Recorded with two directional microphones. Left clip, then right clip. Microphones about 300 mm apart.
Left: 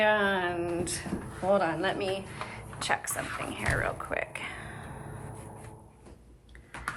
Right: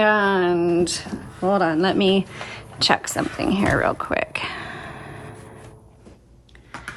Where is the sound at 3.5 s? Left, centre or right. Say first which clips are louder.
Right 10 dB; right.